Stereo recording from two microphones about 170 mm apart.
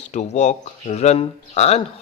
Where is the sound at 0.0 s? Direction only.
45° left (ahead or behind).